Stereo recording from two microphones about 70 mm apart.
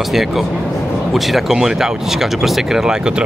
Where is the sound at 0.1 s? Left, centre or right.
Centre.